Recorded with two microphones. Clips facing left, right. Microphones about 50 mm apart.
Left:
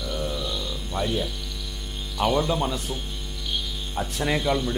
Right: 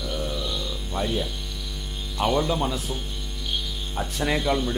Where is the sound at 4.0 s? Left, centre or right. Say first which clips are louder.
Even; centre.